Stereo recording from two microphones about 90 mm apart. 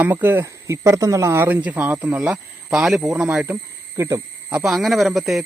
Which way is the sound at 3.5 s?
35° right (ahead or behind).